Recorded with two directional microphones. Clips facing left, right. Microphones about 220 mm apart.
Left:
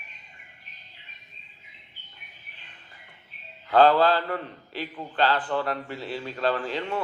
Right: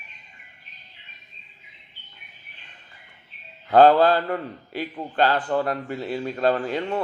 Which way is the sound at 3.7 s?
45° right (ahead or behind).